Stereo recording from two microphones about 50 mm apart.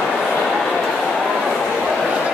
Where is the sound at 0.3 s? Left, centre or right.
Centre.